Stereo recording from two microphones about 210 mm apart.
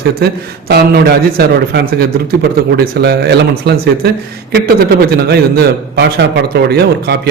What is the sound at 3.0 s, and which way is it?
Speech, 50° right (ahead or behind).